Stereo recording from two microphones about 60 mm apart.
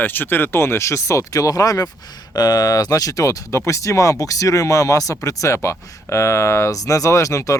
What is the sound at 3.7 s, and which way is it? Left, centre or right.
Speech, left.